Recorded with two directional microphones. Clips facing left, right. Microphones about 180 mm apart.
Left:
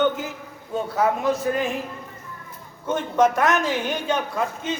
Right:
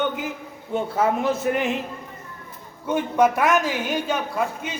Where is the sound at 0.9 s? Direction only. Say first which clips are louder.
Left 1 dB; 25° right (ahead or behind).